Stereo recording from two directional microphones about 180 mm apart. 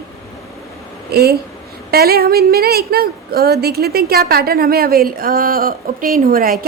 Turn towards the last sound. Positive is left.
turn(degrees=-55)  # may be behind; listen again after turning